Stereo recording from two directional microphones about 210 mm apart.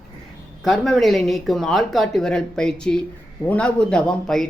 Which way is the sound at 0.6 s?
Centre (ahead or behind).